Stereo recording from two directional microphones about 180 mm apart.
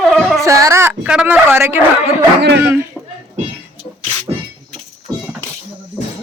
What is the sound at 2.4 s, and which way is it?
Speech, 75° right (ahead or behind).